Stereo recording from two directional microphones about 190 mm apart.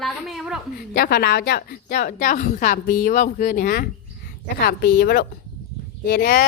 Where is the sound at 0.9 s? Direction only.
55° left (ahead or behind).